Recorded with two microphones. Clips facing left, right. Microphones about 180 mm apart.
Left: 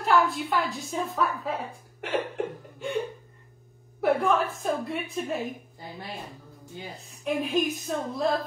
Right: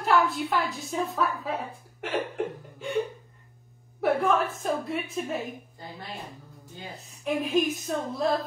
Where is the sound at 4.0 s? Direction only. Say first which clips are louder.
Even; centre (ahead or behind).